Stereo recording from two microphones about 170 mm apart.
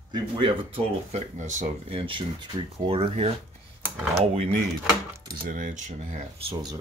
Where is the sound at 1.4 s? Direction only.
45° right (ahead or behind).